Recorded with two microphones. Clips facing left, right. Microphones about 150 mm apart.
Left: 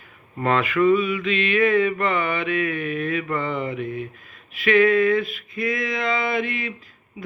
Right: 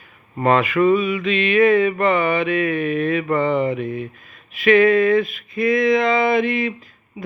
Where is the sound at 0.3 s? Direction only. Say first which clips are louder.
Right 4 dB; 15° right (ahead or behind).